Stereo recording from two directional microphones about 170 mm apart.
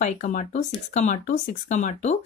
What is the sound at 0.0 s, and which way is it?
A woman's voice, 45° left (ahead or behind).